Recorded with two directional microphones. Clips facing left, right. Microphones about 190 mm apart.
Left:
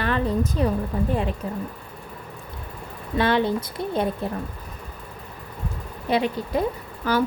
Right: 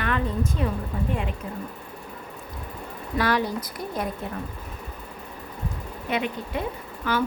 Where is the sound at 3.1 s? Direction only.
25° left (ahead or behind).